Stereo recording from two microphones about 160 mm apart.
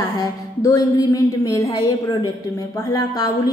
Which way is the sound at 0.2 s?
20° left (ahead or behind).